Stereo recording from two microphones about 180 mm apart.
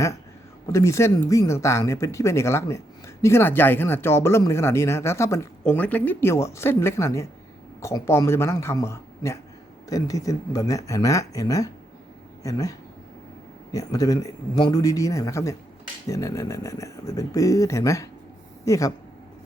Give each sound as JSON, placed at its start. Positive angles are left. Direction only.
{"t": 0.7, "sound": "speech", "side_deg": 15}
{"t": 13.7, "sound": "speech", "side_deg": 20}